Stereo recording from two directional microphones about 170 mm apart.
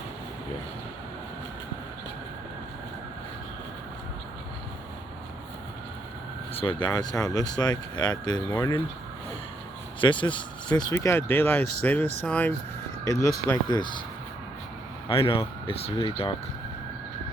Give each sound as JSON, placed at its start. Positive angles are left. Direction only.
{"t": 6.6, "sound": "speech", "side_deg": 30}
{"t": 10.0, "sound": "speech", "side_deg": 30}
{"t": 15.1, "sound": "speech", "side_deg": 35}